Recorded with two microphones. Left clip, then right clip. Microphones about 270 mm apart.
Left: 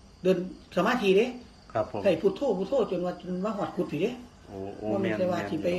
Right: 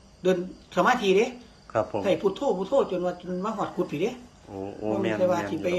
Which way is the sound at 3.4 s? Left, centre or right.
Centre.